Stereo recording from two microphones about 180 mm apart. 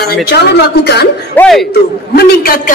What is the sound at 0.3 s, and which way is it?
Speech, 65° left (ahead or behind).